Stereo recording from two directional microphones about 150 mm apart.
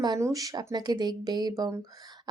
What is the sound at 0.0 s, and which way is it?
Speech, 25° right (ahead or behind).